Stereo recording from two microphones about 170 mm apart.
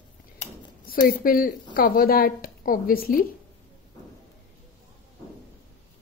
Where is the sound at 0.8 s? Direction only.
60° left (ahead or behind).